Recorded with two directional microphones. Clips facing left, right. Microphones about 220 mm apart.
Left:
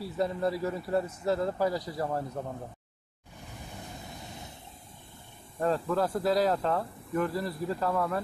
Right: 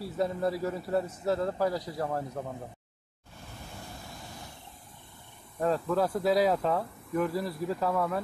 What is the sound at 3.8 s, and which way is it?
Vehicle, 20° left (ahead or behind).